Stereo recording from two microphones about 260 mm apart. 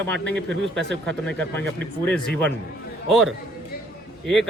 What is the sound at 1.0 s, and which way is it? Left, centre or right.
Speech, centre.